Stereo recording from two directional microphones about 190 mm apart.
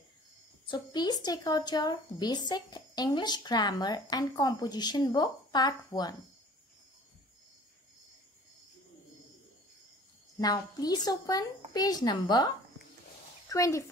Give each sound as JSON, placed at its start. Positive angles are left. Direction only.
{"t": 0.7, "sound": "speech", "side_deg": 20}
{"t": 10.4, "sound": "speech", "side_deg": 20}